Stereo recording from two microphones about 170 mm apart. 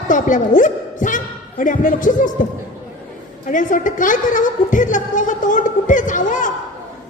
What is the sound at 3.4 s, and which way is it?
A man's voice, 50° left (ahead or behind).